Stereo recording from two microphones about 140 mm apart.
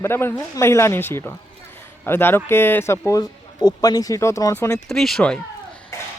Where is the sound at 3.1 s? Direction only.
30° left (ahead or behind).